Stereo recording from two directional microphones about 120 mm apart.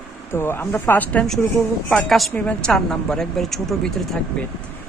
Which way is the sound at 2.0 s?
Centre (ahead or behind).